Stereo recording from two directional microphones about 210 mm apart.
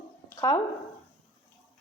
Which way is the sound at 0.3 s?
20° left (ahead or behind).